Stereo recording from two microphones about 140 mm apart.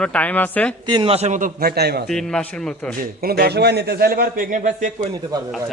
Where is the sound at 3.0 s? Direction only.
90° right; by 4.9 s 70° right (ahead or behind).